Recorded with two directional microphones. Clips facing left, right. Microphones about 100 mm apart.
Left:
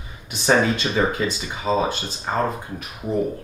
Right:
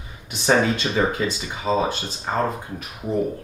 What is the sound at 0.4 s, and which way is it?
Speech, 15° left (ahead or behind).